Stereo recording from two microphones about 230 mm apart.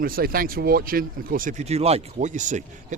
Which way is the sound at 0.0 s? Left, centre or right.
Right.